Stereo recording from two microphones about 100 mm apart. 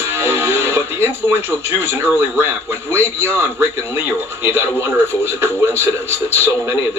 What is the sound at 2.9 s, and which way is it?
A man's voice, 25° right (ahead or behind).